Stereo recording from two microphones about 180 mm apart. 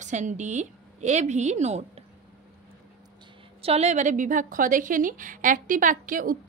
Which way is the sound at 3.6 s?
35° right (ahead or behind).